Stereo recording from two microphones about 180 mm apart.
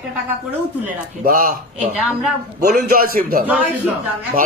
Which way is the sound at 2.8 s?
55° right (ahead or behind).